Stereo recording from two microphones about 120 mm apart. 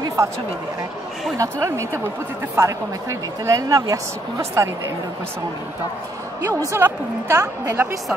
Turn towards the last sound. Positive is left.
turn(degrees=-20)  # may be behind; listen again after turning